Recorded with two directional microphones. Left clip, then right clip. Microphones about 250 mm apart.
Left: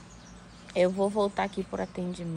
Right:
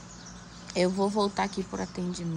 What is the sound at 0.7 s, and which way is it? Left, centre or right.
Speech, centre.